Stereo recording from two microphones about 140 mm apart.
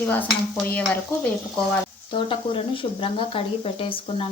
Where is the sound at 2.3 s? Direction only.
40° left (ahead or behind).